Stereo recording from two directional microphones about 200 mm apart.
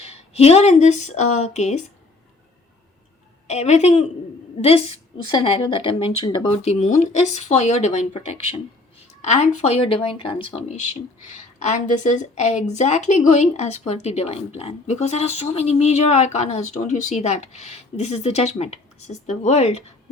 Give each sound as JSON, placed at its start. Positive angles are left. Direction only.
{"t": 0.0, "sound": "speech", "side_deg": 30}
{"t": 3.4, "sound": "a woman's voice", "side_deg": 35}